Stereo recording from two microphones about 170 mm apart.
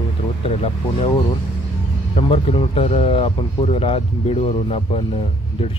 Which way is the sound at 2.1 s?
35° left (ahead or behind).